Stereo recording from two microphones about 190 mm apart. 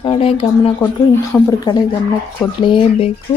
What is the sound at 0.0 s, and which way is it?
Speech, 30° left (ahead or behind).